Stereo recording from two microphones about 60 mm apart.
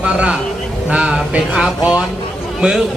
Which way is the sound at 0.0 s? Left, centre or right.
Centre.